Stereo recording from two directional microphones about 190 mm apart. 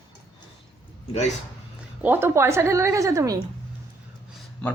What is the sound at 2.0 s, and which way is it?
A woman's voice, 10° right (ahead or behind).